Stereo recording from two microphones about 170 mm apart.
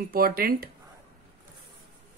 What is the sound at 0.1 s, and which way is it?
Speech, 60° right (ahead or behind).